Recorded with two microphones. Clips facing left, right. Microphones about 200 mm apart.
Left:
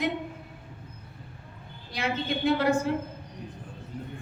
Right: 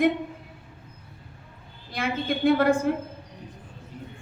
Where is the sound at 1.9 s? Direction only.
55° right (ahead or behind).